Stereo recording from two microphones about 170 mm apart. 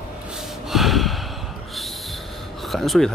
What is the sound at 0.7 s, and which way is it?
Gasp, centre (ahead or behind).